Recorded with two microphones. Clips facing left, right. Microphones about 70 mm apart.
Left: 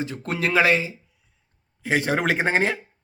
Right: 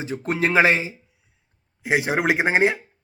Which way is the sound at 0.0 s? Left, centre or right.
Right.